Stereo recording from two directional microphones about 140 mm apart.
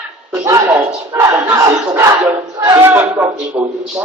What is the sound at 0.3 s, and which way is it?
Battle cry, 25° right (ahead or behind).